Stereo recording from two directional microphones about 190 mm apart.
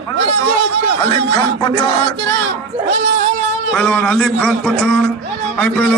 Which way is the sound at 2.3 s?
70° right (ahead or behind).